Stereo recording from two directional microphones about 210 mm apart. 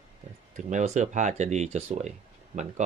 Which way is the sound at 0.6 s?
35° right (ahead or behind).